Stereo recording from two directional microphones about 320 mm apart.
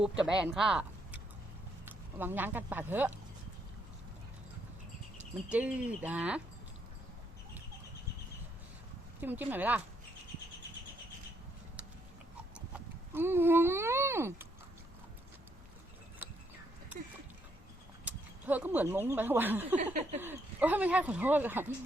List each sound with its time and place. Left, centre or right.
0.3 s speech: centre
5.5 s speech: centre
9.2 s speech: centre
12.5 s speech: centre
18.0 s speech: centre
19.7 s a sound: right
20.1 s speech: centre